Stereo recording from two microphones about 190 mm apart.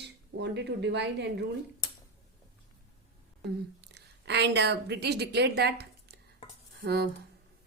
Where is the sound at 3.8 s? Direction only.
60° right (ahead or behind).